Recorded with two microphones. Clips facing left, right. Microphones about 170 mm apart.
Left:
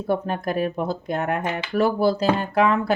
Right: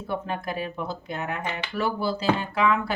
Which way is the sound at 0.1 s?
45° left (ahead or behind).